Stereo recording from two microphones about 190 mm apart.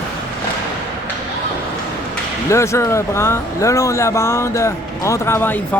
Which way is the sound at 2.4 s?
15° left (ahead or behind).